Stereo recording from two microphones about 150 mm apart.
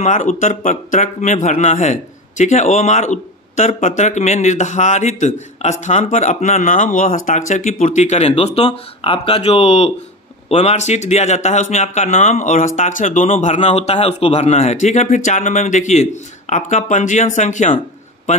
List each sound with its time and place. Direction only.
0.0 s speech: 55° left (ahead or behind)